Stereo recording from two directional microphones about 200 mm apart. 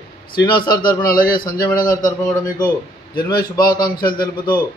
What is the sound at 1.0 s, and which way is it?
Mantra, 45° left (ahead or behind).